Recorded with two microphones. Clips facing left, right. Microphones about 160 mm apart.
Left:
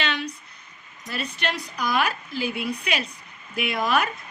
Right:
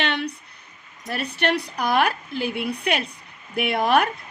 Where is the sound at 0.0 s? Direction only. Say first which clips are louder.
Right 3 dB; 60° right (ahead or behind).